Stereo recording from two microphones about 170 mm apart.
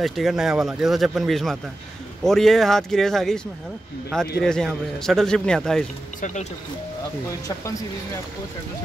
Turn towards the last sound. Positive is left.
turn(degrees=20)  # may be behind; listen again after turning